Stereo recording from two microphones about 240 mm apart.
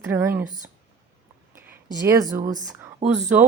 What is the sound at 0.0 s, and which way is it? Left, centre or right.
Speech, centre.